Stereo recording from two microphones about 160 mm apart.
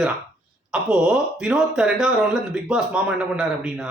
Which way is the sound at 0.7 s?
5° right (ahead or behind).